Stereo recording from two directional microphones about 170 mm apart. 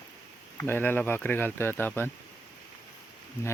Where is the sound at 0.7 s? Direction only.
10° left (ahead or behind).